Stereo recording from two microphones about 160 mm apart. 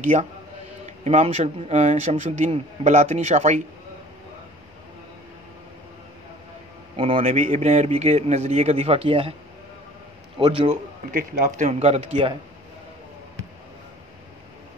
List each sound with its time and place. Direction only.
0.0 s a man's voice: 45° right (ahead or behind)
7.2 s a man's voice: 45° right (ahead or behind)
10.4 s a man's voice: 35° right (ahead or behind)
11.1 s a man's voice: 60° right (ahead or behind); by 12.4 s 35° right (ahead or behind)